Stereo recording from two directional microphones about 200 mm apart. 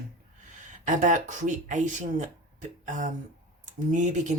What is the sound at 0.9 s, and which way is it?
A woman's voice, 40° right (ahead or behind).